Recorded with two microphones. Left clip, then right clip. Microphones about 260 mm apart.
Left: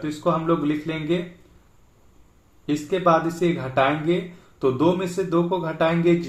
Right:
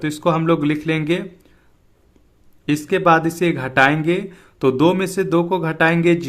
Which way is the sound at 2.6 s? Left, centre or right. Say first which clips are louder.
Right 4 dB; right.